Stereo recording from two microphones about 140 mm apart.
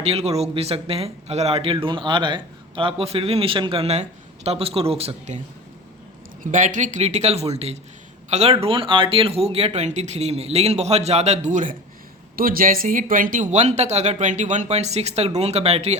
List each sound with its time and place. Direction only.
0.0 s a man's voice: 45° right (ahead or behind)
6.4 s a man's voice: 65° right (ahead or behind)
12.4 s a man's voice: 90° right; by 16.0 s 50° right (ahead or behind)